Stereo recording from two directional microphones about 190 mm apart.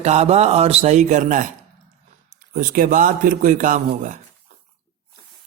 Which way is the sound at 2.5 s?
45° right (ahead or behind).